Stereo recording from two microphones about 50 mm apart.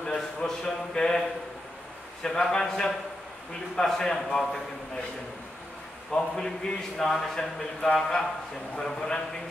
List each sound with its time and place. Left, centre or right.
0.0 s speech: centre
2.2 s speech: centre
6.1 s speech: centre